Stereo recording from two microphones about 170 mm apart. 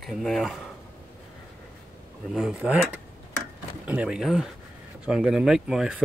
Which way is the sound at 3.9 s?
5° right (ahead or behind).